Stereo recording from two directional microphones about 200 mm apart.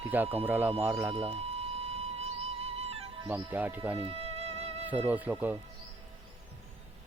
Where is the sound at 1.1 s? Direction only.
30° right (ahead or behind).